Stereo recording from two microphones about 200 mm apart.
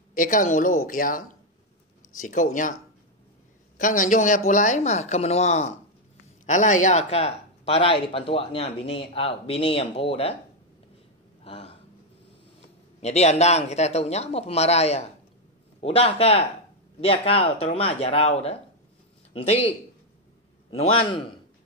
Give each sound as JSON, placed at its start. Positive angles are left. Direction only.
{"t": 0.1, "sound": "speech", "side_deg": 40}
{"t": 3.7, "sound": "speech", "side_deg": 40}
{"t": 11.4, "sound": "a sound", "side_deg": 30}
{"t": 12.5, "sound": "speech", "side_deg": 30}
{"t": 20.7, "sound": "speech", "side_deg": 30}